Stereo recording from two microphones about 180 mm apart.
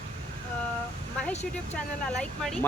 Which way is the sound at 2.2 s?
5° left (ahead or behind).